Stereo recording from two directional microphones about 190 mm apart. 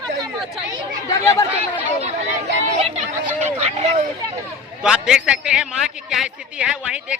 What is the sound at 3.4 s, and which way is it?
Speech, 35° right (ahead or behind).